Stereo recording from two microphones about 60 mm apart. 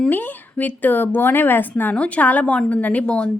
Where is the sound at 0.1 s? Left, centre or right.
Left.